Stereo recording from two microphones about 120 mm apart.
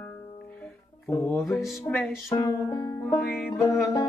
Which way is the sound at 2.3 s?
25° left (ahead or behind).